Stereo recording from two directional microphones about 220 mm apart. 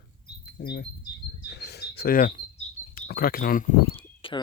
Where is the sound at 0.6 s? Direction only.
45° left (ahead or behind).